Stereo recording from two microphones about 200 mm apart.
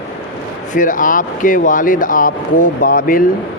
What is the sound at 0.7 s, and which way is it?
Speech, 40° left (ahead or behind).